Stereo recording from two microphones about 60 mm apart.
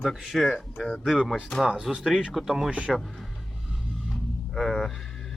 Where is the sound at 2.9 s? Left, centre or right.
Centre.